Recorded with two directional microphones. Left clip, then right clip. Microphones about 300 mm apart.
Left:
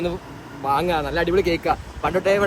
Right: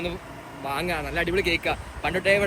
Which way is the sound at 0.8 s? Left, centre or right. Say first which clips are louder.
Left 5 dB; centre.